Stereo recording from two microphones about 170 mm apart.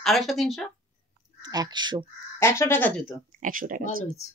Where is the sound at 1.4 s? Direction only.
25° right (ahead or behind).